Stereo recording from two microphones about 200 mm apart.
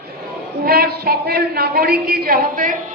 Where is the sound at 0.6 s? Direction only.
50° right (ahead or behind).